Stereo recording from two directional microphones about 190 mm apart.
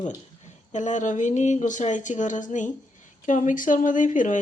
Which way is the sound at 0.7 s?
40° left (ahead or behind).